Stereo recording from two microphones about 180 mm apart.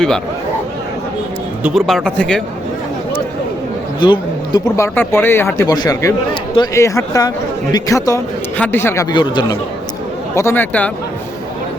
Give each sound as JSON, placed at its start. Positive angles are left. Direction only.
{"t": 1.6, "sound": "speech", "side_deg": 0}
{"t": 4.0, "sound": "a man's voice", "side_deg": 25}
{"t": 4.8, "sound": "speech", "side_deg": 15}
{"t": 9.1, "sound": "a man's voice", "side_deg": 25}
{"t": 10.3, "sound": "speech", "side_deg": 15}